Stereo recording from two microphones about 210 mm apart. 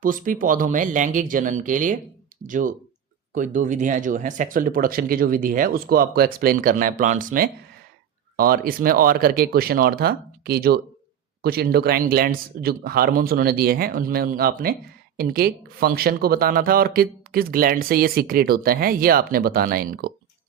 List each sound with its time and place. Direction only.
0.0 s speech: 40° right (ahead or behind)